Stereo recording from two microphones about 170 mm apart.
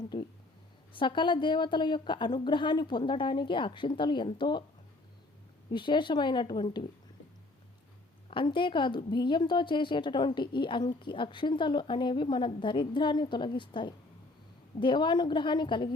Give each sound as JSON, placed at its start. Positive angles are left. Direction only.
{"t": 0.0, "sound": "a sound", "side_deg": 25}
{"t": 0.9, "sound": "a woman's voice", "side_deg": 30}
{"t": 5.7, "sound": "a woman's voice", "side_deg": 25}
{"t": 8.3, "sound": "a woman's voice", "side_deg": 30}